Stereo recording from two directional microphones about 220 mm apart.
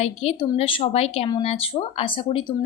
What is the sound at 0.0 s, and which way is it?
Speech, 30° left (ahead or behind).